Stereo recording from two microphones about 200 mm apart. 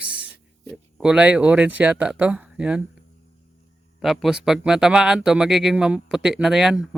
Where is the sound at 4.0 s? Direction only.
Centre (ahead or behind).